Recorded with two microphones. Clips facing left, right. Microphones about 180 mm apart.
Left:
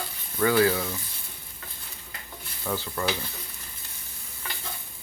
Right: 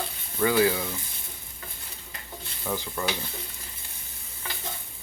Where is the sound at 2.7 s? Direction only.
10° right (ahead or behind).